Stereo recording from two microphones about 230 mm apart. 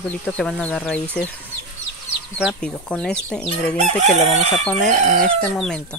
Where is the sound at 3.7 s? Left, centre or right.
Right.